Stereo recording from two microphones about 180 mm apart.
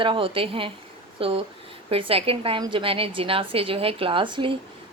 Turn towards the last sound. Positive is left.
turn(degrees=-25)  # may be behind; listen again after turning